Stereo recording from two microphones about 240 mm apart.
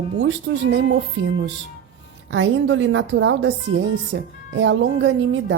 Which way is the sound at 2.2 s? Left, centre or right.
Right.